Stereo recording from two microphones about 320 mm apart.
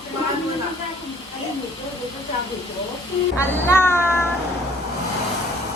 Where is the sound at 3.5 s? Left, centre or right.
Centre.